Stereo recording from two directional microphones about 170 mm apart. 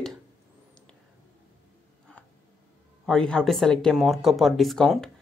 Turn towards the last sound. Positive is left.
turn(degrees=0)  # may be behind; listen again after turning